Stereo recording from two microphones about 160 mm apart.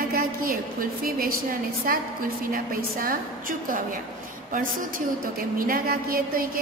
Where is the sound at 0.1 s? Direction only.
65° right (ahead or behind).